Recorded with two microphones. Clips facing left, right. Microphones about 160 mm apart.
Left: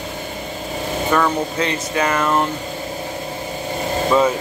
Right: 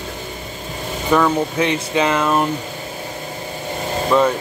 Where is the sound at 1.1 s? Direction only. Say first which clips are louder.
Right 4 dB; 10° right (ahead or behind).